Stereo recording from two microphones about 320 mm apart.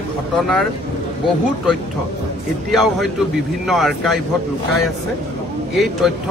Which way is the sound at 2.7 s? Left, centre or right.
Centre.